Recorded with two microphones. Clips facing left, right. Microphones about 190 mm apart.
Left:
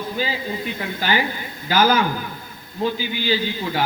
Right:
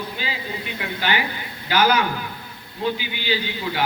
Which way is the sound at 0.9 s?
40° left (ahead or behind).